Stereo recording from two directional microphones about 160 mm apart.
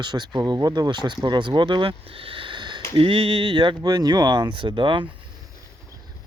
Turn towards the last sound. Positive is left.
turn(degrees=-30)  # may be behind; listen again after turning